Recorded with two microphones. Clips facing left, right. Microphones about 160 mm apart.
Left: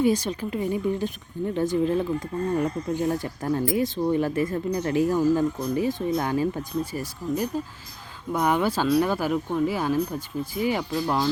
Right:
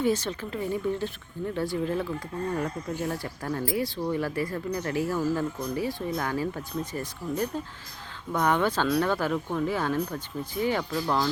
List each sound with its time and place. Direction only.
0.0 s speech: 15° left (ahead or behind)